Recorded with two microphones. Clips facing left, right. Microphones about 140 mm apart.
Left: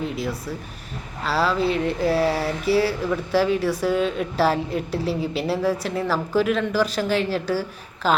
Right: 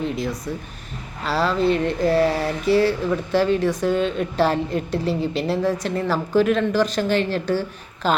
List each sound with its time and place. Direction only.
0.0 s a woman's voice: 5° left (ahead or behind)